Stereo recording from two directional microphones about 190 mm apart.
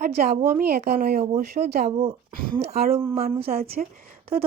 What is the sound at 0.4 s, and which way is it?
Speech, 50° right (ahead or behind).